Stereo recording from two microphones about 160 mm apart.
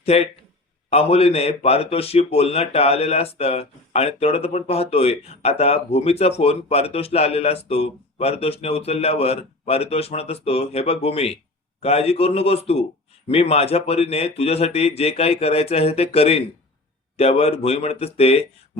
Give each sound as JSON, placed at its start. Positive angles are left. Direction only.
{"t": 0.0, "sound": "a man's voice", "side_deg": 40}